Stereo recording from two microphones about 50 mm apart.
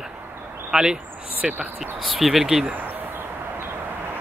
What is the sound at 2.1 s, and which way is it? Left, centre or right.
Speech, centre.